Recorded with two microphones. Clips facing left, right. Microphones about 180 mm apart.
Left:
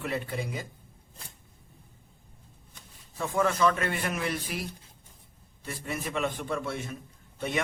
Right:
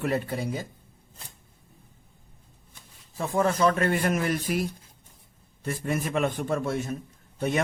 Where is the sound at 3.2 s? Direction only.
35° right (ahead or behind).